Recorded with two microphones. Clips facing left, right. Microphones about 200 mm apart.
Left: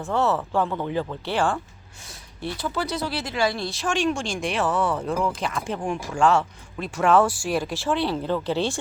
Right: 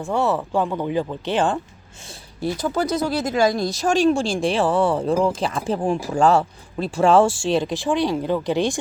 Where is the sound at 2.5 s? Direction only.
45° right (ahead or behind).